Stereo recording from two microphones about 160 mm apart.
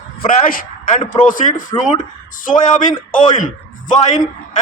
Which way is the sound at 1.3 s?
55° left (ahead or behind).